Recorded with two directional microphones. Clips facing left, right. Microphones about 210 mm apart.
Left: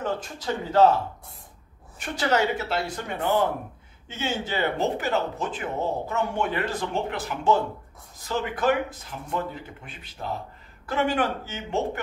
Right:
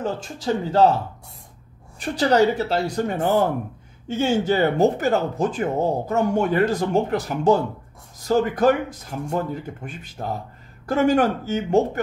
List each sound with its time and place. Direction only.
0.0 s speech: 30° right (ahead or behind)
2.0 s speech: 35° right (ahead or behind)